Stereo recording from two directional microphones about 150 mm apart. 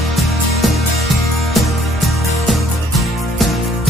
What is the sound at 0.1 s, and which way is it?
Music, centre (ahead or behind).